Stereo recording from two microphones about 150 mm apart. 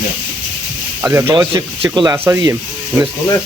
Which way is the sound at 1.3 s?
30° right (ahead or behind).